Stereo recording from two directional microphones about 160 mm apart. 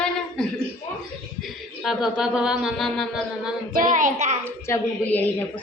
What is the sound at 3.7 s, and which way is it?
Speech, 55° right (ahead or behind).